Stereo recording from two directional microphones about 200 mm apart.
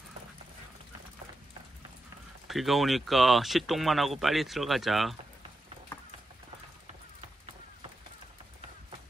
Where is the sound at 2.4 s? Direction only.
Centre (ahead or behind).